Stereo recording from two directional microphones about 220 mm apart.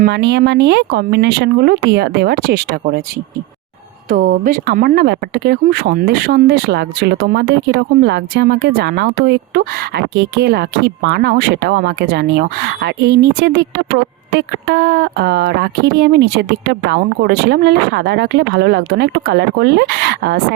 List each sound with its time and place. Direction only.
0.0 s speech: 50° right (ahead or behind)
4.1 s speech: 40° right (ahead or behind)